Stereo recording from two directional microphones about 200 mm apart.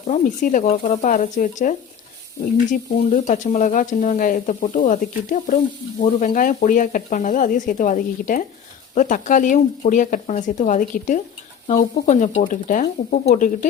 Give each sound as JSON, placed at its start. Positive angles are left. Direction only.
{"t": 0.1, "sound": "speech", "side_deg": 40}
{"t": 2.7, "sound": "speech", "side_deg": 40}